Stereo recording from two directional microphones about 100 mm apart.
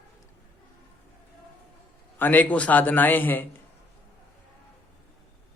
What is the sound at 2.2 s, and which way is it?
A man's voice, 15° left (ahead or behind).